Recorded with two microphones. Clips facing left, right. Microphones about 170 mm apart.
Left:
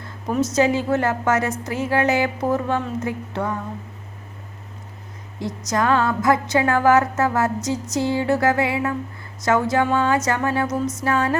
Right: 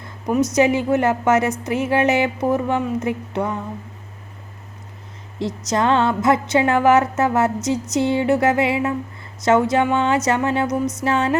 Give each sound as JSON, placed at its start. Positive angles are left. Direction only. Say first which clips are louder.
{"t": 0.0, "sound": "a woman's voice", "louder": "right 3 dB", "side_deg": -15}
{"t": 5.4, "sound": "a woman's voice", "louder": "right 2 dB", "side_deg": -25}